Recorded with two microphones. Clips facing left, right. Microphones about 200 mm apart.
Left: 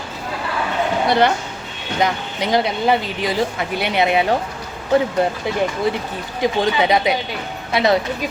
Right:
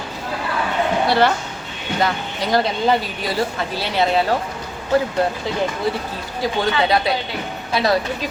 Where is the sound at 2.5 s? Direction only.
20° left (ahead or behind).